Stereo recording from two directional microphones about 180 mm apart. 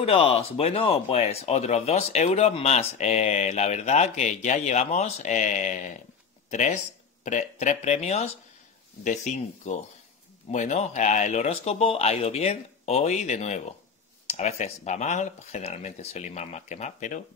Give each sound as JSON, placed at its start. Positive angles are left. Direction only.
{"t": 0.0, "sound": "speech", "side_deg": 30}